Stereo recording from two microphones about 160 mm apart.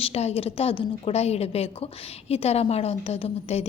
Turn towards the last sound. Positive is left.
turn(degrees=40)  # may be behind; listen again after turning